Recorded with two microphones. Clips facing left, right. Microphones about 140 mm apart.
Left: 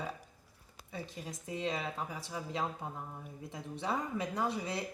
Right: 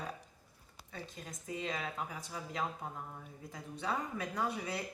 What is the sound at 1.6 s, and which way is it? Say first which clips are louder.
Speech: left 4 dB; 30° left (ahead or behind).